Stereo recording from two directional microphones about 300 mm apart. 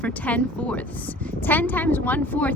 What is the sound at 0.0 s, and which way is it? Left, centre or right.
A woman's voice, centre.